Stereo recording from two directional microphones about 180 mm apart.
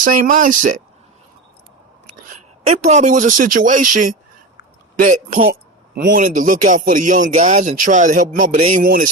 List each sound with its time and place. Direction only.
0.0 s speech: 45° right (ahead or behind)
2.3 s speech: 40° right (ahead or behind)
5.5 s a sound: 65° right (ahead or behind)
6.1 s speech: 45° right (ahead or behind)